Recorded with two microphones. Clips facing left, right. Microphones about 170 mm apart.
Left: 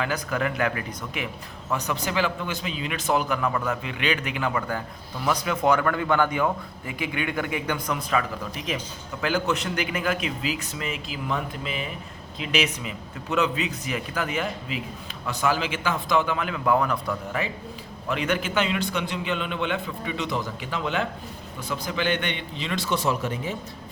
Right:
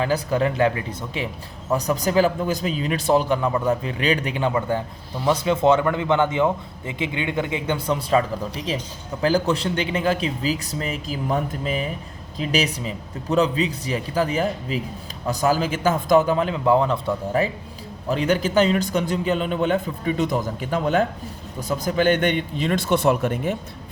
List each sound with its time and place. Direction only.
0.0 s a man's voice: 30° right (ahead or behind); by 23.6 s 55° right (ahead or behind)